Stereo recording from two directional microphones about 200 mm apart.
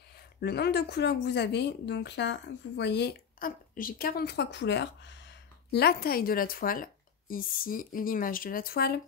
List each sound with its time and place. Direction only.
0.4 s speech: 55° left (ahead or behind)